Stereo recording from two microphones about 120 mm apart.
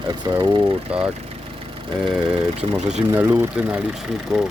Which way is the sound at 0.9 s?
10° right (ahead or behind).